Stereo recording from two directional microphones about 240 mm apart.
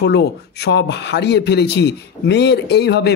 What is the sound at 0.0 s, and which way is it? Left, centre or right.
Speech, left.